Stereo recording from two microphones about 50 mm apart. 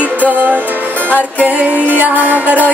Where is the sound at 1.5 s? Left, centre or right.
Right.